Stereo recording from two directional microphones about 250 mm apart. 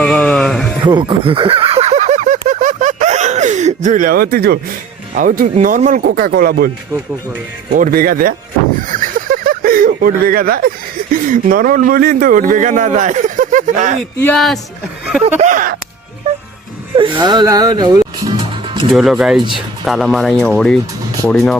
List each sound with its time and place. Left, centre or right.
0.0 s music: centre
0.9 s a sound: centre; by 4.6 s right
5.1 s speech: right
7.8 s speech: right
14.2 s speech: centre
15.4 s a sound: right
17.0 s music: centre
18.9 s speech: centre